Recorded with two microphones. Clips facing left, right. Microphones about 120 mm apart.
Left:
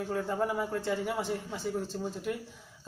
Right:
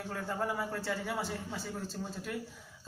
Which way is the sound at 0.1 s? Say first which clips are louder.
Left 4 dB; 25° left (ahead or behind).